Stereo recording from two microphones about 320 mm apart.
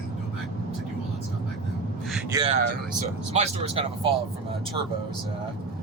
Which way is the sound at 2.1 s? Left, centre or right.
Centre.